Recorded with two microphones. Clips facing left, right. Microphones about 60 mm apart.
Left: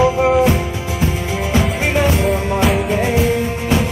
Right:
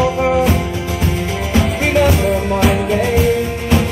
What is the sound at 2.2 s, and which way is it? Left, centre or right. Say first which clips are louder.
Music: right 1 dB; centre.